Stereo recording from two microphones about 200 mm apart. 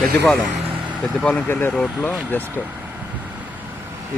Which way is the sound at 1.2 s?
5° left (ahead or behind).